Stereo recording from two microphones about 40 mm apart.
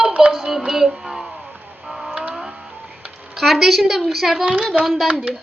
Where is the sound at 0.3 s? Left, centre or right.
Centre.